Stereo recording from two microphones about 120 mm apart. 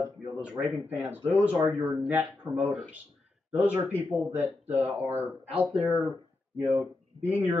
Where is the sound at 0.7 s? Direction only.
20° right (ahead or behind).